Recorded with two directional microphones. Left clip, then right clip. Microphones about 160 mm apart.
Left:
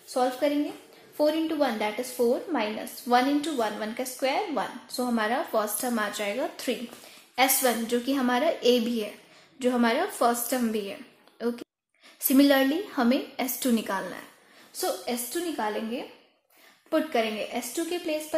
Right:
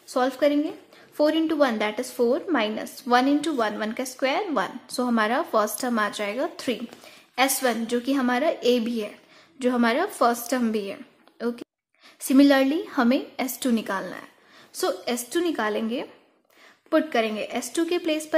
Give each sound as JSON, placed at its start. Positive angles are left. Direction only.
{"t": 0.1, "sound": "a woman's voice", "side_deg": -35}
{"t": 14.8, "sound": "a woman's voice", "side_deg": -35}
{"t": 16.9, "sound": "a woman's voice", "side_deg": -25}